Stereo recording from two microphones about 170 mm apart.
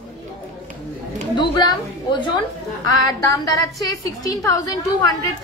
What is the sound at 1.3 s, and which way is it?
A woman's voice, 25° left (ahead or behind).